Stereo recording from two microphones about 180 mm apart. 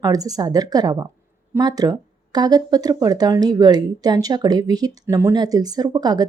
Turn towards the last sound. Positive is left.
turn(degrees=-20)  # may be behind; listen again after turning